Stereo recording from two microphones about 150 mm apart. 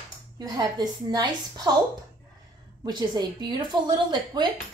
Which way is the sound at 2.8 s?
30° right (ahead or behind).